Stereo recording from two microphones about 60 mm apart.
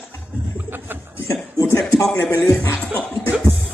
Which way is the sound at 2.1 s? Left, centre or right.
Left.